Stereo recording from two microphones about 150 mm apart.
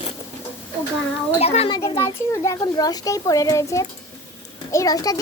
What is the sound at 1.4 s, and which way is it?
Speech, 40° left (ahead or behind).